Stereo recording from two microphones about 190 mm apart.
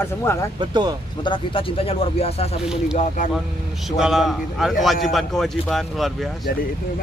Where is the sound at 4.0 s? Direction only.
Centre (ahead or behind).